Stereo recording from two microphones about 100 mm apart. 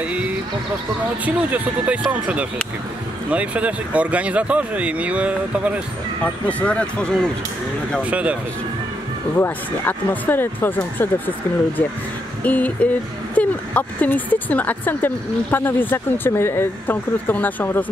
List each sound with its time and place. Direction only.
0.0 s vehicle: 15° right (ahead or behind)
1.2 s speech: 15° right (ahead or behind)
6.6 s speech: 10° left (ahead or behind)
8.0 s speech: 15° right (ahead or behind)
9.4 s speech: 20° left (ahead or behind)